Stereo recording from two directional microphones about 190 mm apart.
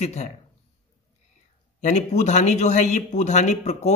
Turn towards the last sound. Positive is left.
turn(degrees=35)  # may be behind; listen again after turning